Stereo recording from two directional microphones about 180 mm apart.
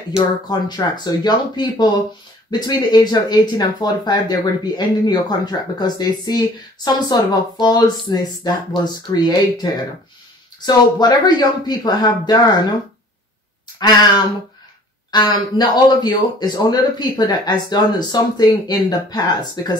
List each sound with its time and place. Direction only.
0.1 s speech: 20° left (ahead or behind)
13.7 s speech: 25° left (ahead or behind)